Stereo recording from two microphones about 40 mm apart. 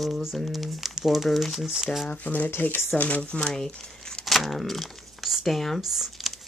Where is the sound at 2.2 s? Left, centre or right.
Left.